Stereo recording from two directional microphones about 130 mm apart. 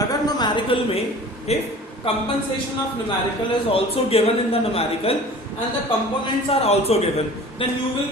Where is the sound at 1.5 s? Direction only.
55° left (ahead or behind).